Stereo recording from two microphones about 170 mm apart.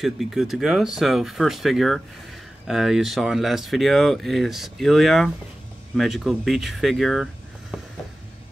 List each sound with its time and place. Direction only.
0.0 s speech: centre (ahead or behind)